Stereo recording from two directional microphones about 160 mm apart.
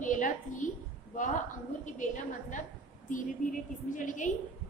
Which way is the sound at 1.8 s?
50° left (ahead or behind).